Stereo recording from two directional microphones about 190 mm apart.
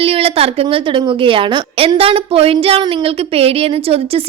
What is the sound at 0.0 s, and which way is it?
A woman's voice, 30° right (ahead or behind).